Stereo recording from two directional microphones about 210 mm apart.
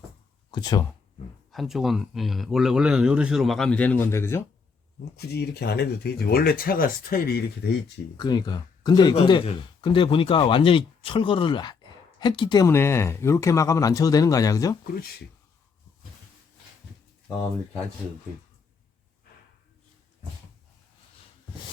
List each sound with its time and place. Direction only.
0.5 s speech: 20° left (ahead or behind)
1.5 s speech: centre (ahead or behind)
5.1 s speech: 50° left (ahead or behind)
8.1 s speech: 20° left (ahead or behind)